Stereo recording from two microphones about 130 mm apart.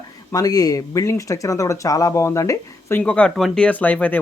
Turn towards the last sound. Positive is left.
turn(degrees=10)  # may be behind; listen again after turning